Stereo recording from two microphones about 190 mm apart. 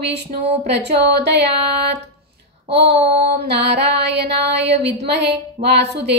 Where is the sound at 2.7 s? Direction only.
60° right (ahead or behind).